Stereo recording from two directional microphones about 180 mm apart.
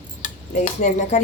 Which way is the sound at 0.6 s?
40° left (ahead or behind).